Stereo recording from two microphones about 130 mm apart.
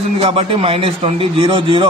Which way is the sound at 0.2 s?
45° right (ahead or behind).